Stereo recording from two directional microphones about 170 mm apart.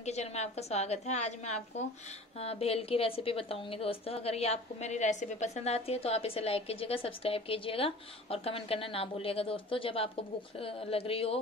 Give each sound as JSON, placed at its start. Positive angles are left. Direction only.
{"t": 0.0, "sound": "a woman's voice", "side_deg": 40}